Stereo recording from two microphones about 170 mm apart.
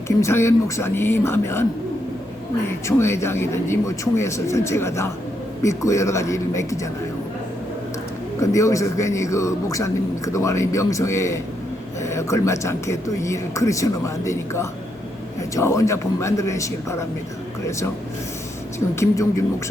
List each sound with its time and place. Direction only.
0.2 s a man's voice: 15° left (ahead or behind)
2.8 s a man's voice: 15° left (ahead or behind)
8.4 s a man's voice: 20° left (ahead or behind)
18.9 s a man's voice: 20° left (ahead or behind)